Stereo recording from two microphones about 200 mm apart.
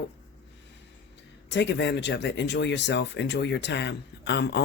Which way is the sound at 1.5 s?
60° left (ahead or behind).